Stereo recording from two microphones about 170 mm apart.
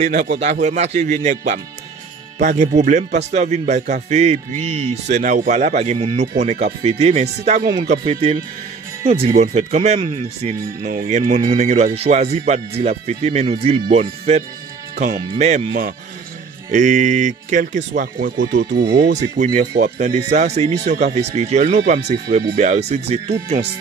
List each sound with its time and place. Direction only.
0.0 s speech: 55° right (ahead or behind)
0.4 s speech: 45° right (ahead or behind)
9.3 s speech: 45° right (ahead or behind)
15.0 s speech: 50° right (ahead or behind)
18.7 s speech: 75° right (ahead or behind)
20.0 s speech: 45° right (ahead or behind)